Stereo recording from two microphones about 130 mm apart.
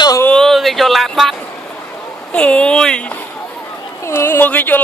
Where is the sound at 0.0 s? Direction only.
30° left (ahead or behind).